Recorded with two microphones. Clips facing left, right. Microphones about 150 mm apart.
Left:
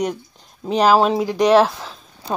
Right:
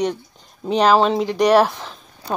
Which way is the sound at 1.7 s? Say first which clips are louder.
Even; 5° left (ahead or behind).